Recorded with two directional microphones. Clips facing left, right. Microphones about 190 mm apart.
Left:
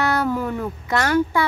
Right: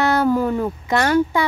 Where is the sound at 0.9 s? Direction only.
20° right (ahead or behind).